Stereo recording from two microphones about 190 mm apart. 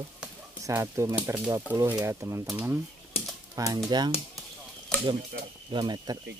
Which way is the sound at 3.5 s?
20° right (ahead or behind).